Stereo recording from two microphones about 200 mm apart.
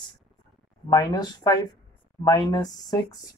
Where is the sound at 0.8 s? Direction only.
20° left (ahead or behind).